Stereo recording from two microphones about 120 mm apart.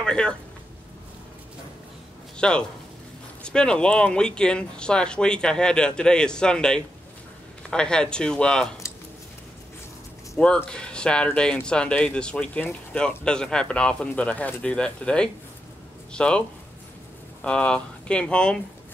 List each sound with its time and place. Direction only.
0.0 s speech: 10° left (ahead or behind)
2.3 s a man's voice: 5° left (ahead or behind)
8.8 s a sound: 25° left (ahead or behind)
10.3 s speech: 5° left (ahead or behind)